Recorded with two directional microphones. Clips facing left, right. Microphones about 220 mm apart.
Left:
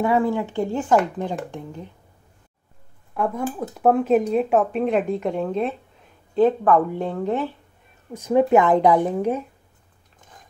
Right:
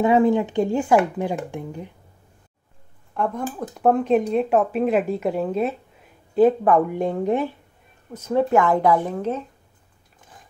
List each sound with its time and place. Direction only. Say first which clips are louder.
0.0 s speech: right 3 dB; 20° right (ahead or behind)
3.2 s speech: left 1 dB; 5° left (ahead or behind); by 7.5 s 15° right (ahead or behind)
8.1 s speech: left 3 dB; 15° left (ahead or behind)